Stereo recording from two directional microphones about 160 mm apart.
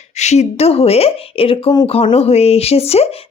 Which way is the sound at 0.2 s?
45° left (ahead or behind).